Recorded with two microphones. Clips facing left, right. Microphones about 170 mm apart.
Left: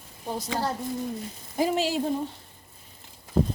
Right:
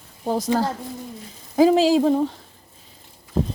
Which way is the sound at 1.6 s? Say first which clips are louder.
Right 10 dB; 90° right.